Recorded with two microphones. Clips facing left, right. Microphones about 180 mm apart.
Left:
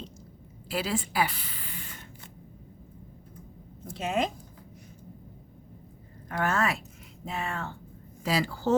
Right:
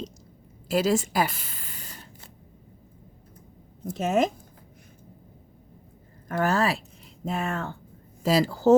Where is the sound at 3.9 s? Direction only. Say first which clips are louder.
Right 5 dB; 45° right (ahead or behind).